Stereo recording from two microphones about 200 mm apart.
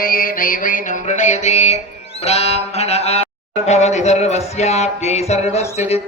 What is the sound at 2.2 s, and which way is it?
Music, 30° left (ahead or behind).